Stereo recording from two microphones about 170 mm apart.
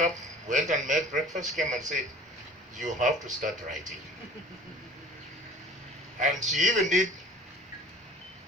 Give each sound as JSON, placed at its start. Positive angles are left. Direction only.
{"t": 0.0, "sound": "a man's voice", "side_deg": -45}
{"t": 3.0, "sound": "a man's voice", "side_deg": -50}
{"t": 6.1, "sound": "a man's voice", "side_deg": -45}